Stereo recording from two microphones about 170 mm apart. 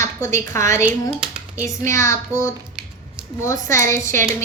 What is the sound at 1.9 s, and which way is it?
A woman's voice, 15° left (ahead or behind).